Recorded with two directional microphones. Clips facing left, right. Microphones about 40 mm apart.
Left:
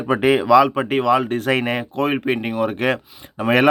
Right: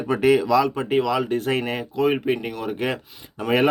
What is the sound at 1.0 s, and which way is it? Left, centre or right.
Speech, left.